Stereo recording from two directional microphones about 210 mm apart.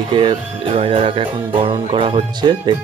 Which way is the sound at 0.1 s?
25° right (ahead or behind).